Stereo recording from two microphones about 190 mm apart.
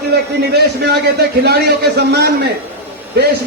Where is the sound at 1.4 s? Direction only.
60° right (ahead or behind).